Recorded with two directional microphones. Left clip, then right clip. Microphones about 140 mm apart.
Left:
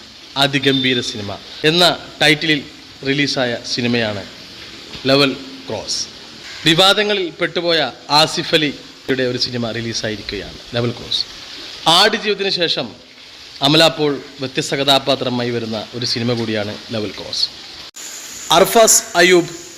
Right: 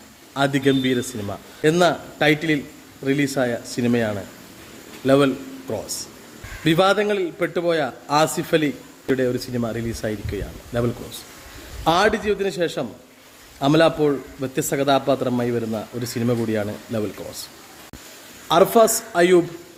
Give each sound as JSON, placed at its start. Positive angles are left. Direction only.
{"t": 0.3, "sound": "a man's voice", "side_deg": -15}
{"t": 18.4, "sound": "a man's voice", "side_deg": -5}